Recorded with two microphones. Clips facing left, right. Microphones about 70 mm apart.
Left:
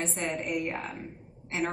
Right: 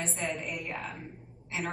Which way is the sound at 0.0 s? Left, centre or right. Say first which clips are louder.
Left 2 dB; left.